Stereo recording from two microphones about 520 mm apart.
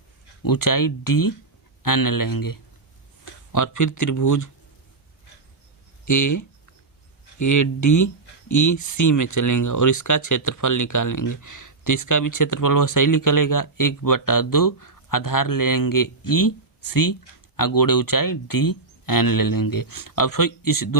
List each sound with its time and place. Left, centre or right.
0.4 s speech: left
6.1 s speech: left